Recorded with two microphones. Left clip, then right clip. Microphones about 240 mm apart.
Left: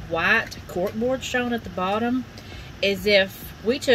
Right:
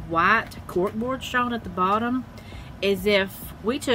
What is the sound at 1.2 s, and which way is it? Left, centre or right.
A woman's voice, right.